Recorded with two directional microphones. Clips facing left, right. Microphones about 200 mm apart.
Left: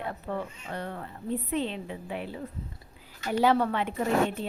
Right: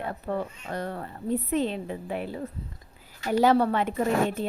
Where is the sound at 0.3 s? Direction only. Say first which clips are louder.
Right 6 dB; 40° right (ahead or behind).